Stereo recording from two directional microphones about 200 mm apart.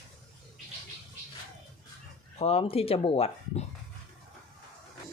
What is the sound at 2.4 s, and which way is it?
Speech, 30° left (ahead or behind).